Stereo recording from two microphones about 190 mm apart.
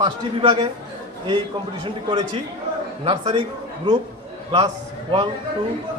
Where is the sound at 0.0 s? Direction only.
25° right (ahead or behind).